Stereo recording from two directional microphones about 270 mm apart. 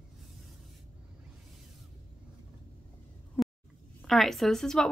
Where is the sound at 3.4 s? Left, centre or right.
Centre.